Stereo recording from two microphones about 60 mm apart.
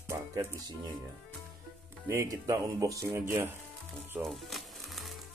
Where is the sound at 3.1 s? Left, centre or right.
Right.